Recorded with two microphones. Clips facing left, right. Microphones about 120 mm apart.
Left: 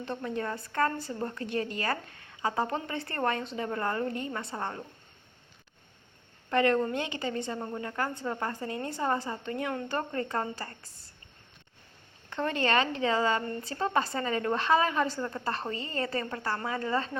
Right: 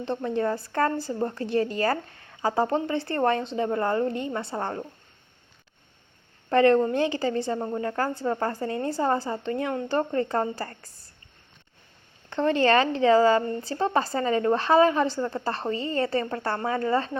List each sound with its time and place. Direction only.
0.0 s a woman's voice: 30° right (ahead or behind)
6.5 s a woman's voice: 30° right (ahead or behind)
12.3 s a woman's voice: 30° right (ahead or behind)